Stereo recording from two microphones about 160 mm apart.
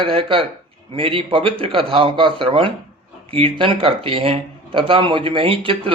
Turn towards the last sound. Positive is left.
turn(degrees=-35)  # may be behind; listen again after turning